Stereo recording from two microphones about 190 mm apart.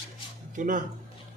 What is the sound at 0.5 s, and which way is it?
Speech, 45° right (ahead or behind).